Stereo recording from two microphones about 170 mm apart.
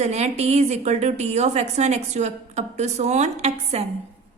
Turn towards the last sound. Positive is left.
turn(degrees=-40)  # may be behind; listen again after turning